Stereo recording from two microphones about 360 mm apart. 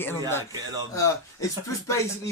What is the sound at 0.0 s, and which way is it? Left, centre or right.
Speech, centre.